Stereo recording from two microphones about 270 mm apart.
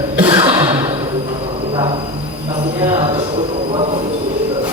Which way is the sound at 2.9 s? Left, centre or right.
Centre.